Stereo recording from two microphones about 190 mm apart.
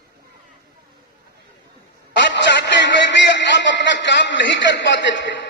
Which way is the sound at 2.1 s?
70° left (ahead or behind).